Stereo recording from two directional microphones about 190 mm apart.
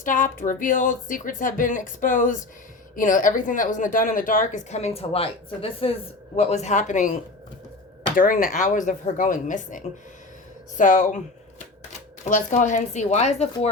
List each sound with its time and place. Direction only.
0.0 s a woman's voice: 45° left (ahead or behind)
12.2 s a woman's voice: 40° left (ahead or behind)